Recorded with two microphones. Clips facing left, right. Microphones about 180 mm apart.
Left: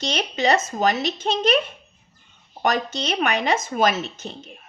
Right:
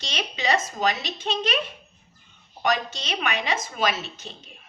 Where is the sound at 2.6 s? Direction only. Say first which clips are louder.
Left 3 dB; 45° left (ahead or behind).